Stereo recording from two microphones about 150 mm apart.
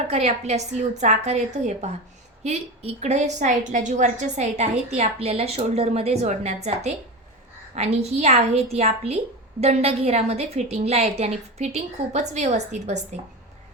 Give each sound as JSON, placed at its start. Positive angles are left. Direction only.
{"t": 0.1, "sound": "a woman's voice", "side_deg": -45}